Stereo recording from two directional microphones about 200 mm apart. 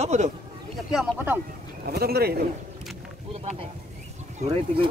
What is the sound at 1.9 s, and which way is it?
Speech, 50° right (ahead or behind).